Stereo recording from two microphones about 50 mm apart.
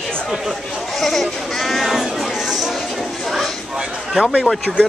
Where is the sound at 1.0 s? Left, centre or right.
Centre.